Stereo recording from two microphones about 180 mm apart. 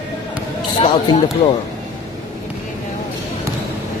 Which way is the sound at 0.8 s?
25° left (ahead or behind).